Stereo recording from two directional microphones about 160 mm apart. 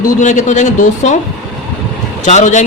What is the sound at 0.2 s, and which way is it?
Speech, 50° left (ahead or behind).